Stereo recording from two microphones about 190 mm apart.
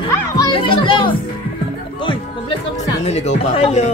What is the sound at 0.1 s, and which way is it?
Children playing, 25° left (ahead or behind).